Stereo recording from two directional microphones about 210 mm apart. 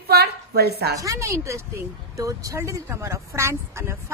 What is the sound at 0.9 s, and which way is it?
A woman's voice, 15° right (ahead or behind).